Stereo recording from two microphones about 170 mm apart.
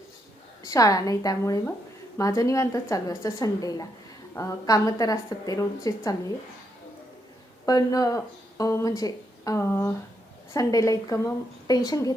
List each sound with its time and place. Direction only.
0.6 s speech: 20° left (ahead or behind)
7.6 s speech: 20° left (ahead or behind)